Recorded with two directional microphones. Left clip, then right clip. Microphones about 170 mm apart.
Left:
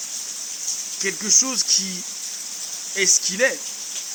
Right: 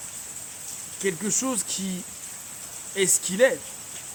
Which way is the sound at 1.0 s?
30° right (ahead or behind).